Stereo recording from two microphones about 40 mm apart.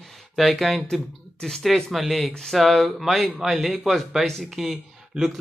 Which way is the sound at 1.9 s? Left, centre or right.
Centre.